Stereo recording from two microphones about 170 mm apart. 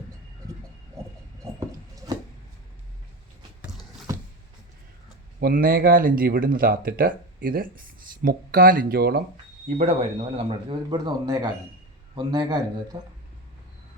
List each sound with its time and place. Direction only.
3.6 s a sound: centre (ahead or behind)
5.4 s speech: 60° right (ahead or behind)
9.6 s a man's voice: 40° right (ahead or behind); by 13.0 s 20° right (ahead or behind)